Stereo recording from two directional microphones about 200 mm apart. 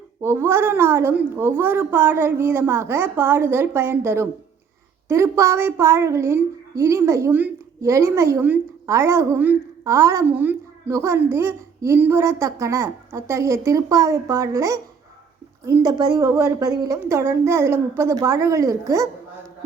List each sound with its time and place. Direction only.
0.2 s a woman's voice: 10° right (ahead or behind)